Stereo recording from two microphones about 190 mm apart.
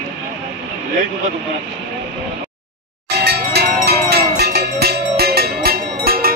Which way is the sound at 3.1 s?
60° right (ahead or behind).